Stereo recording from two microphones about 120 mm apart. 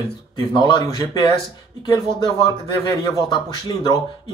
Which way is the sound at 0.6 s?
35° left (ahead or behind).